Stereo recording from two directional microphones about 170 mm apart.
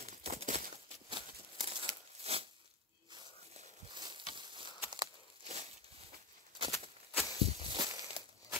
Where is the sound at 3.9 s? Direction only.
25° right (ahead or behind).